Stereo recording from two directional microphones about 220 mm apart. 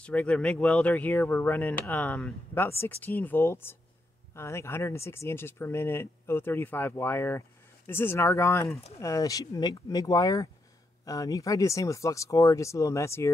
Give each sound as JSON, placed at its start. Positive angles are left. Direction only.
{"t": 0.0, "sound": "speech", "side_deg": 5}